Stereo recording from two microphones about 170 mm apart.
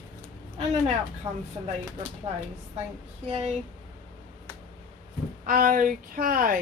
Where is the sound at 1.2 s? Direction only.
25° right (ahead or behind).